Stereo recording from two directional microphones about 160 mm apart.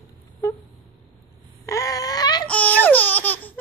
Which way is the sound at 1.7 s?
20° left (ahead or behind).